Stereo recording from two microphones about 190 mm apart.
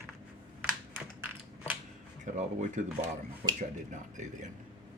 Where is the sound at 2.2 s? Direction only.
40° right (ahead or behind).